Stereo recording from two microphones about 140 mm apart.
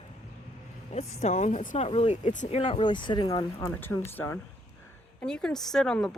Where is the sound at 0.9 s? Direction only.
55° left (ahead or behind).